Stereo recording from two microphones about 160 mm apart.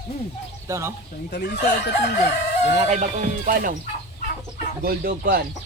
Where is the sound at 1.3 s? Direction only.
90° left.